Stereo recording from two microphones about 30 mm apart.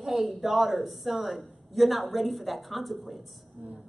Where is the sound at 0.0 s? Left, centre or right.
Centre.